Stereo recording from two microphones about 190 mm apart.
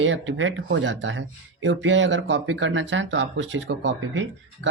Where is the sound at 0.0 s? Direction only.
80° right.